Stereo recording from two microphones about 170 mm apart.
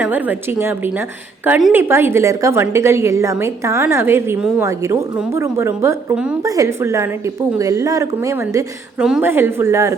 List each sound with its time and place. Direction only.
0.0 s a woman's voice: 10° right (ahead or behind)
1.5 s a woman's voice: centre (ahead or behind)
1.7 s a woman's voice: 15° right (ahead or behind)
9.0 s a woman's voice: 5° right (ahead or behind)